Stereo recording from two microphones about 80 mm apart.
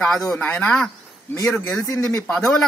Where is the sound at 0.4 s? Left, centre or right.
Centre.